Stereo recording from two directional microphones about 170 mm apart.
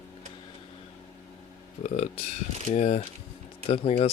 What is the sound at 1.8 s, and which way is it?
Speech, 40° left (ahead or behind).